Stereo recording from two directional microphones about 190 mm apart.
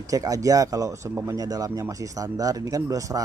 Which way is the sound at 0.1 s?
20° right (ahead or behind).